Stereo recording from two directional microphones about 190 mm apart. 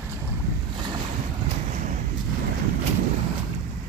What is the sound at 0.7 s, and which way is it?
Boat, 25° right (ahead or behind).